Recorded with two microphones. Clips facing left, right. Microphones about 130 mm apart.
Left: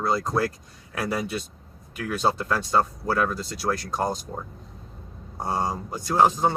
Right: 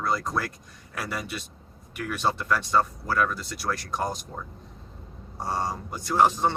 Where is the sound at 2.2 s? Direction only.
30° left (ahead or behind).